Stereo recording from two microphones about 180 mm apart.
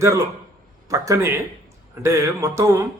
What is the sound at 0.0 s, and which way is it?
A man's voice, 15° right (ahead or behind).